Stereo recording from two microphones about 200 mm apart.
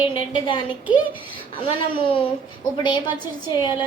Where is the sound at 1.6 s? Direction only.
25° left (ahead or behind).